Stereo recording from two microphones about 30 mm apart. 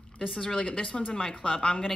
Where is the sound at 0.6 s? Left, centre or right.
Left.